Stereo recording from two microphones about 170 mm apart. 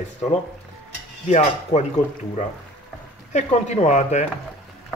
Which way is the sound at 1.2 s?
40° left (ahead or behind).